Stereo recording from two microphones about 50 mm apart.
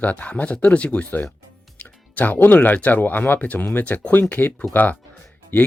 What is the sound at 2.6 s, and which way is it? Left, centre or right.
Speech, left.